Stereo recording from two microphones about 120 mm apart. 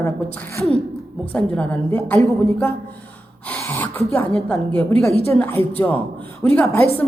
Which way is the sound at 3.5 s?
15° left (ahead or behind).